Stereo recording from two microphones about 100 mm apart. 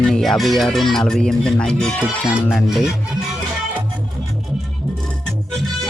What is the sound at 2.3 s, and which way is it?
Speech, 10° right (ahead or behind).